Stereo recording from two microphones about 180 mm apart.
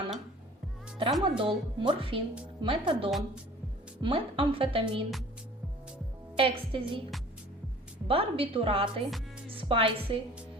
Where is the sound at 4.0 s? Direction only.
30° right (ahead or behind).